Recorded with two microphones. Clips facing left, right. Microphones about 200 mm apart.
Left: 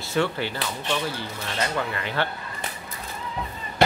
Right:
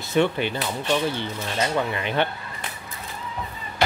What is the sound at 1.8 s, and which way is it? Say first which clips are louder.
Speech: right 3 dB; 20° right (ahead or behind).